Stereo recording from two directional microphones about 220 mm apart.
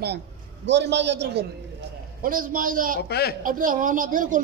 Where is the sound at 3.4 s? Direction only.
40° right (ahead or behind).